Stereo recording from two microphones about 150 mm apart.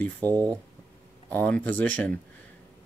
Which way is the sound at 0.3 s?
25° right (ahead or behind).